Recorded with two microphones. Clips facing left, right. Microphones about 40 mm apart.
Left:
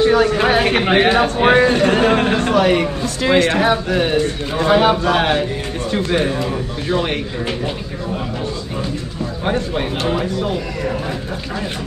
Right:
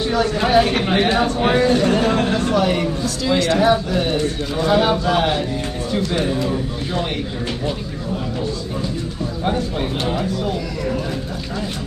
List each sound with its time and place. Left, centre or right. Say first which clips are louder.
0.0 s a man's voice: left 5 dB; left
9.4 s speech: left 2 dB; left